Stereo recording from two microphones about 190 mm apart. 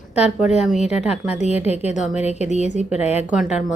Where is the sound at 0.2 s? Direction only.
5° right (ahead or behind).